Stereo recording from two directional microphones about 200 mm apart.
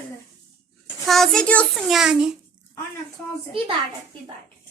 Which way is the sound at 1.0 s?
Centre (ahead or behind).